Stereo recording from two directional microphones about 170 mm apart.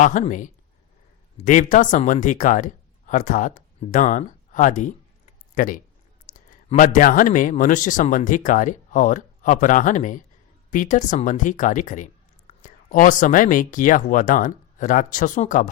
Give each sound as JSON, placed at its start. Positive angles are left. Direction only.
{"t": 0.0, "sound": "speech", "side_deg": 50}
{"t": 6.3, "sound": "a sound", "side_deg": 50}
{"t": 6.7, "sound": "speech", "side_deg": 50}